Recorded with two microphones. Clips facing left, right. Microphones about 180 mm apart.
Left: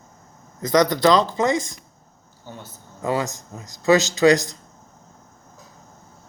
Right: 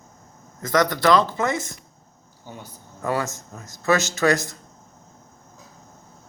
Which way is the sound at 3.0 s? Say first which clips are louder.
Left 2 dB; 15° left (ahead or behind).